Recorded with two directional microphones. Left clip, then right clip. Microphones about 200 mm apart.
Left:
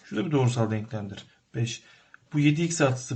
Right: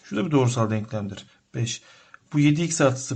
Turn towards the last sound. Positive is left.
turn(degrees=-35)  # may be behind; listen again after turning